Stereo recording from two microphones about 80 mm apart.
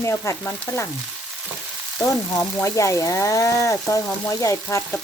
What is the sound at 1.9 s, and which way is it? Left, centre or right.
Frying, left.